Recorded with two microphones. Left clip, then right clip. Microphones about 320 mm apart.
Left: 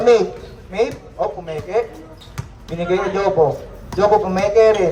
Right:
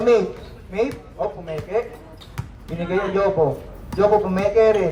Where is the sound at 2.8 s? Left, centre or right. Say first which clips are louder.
Left 2 dB; left.